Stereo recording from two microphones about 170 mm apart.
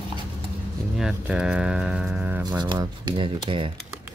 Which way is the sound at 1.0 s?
5° right (ahead or behind).